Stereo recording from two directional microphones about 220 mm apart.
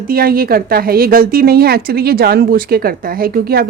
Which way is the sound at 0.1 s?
40° right (ahead or behind).